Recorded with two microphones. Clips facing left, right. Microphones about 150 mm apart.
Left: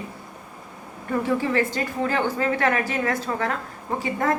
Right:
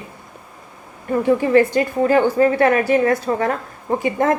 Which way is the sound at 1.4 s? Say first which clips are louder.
Right 9 dB; 15° right (ahead or behind).